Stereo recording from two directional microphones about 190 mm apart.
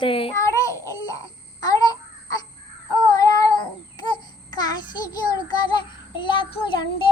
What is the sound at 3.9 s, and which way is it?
Babbling, 25° left (ahead or behind).